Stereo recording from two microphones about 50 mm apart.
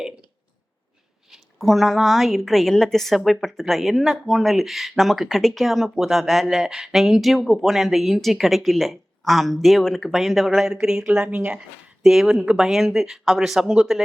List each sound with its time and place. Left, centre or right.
1.3 s a woman's voice: centre; by 11.3 s right
12.0 s speech: centre